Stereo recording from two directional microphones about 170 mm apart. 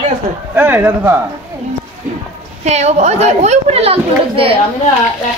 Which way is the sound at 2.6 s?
40° right (ahead or behind).